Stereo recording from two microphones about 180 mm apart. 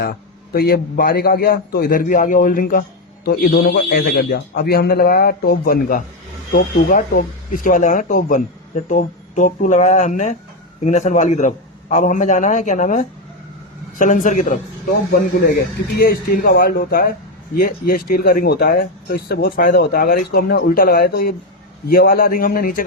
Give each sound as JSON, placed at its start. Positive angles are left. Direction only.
{"t": 0.5, "sound": "a man's voice", "side_deg": 55}
{"t": 15.1, "sound": "a man's voice", "side_deg": 60}